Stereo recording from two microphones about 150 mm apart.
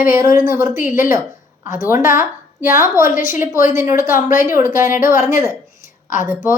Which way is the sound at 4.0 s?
15° right (ahead or behind).